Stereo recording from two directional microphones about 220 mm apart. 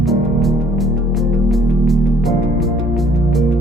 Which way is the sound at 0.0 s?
Centre (ahead or behind).